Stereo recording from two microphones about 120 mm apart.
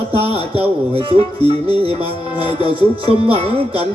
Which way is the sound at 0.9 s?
50° right (ahead or behind).